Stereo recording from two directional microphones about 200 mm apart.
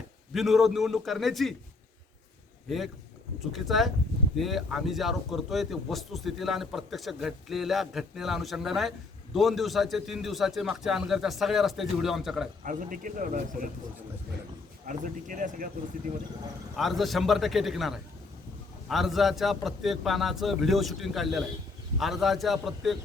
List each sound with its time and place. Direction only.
0.3 s speech: centre (ahead or behind)
2.6 s a man's voice: centre (ahead or behind)
12.6 s speech: 40° right (ahead or behind)
14.8 s speech: 40° right (ahead or behind)
16.7 s speech: centre (ahead or behind)